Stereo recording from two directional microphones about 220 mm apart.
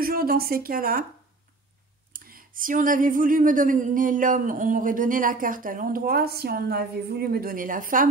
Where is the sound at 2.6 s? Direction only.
40° right (ahead or behind).